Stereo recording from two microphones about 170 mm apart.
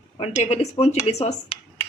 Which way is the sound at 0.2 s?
40° left (ahead or behind).